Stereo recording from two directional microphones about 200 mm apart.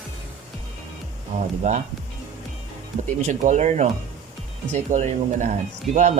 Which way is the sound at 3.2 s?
40° right (ahead or behind).